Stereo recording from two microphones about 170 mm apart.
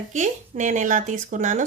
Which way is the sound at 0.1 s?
45° right (ahead or behind).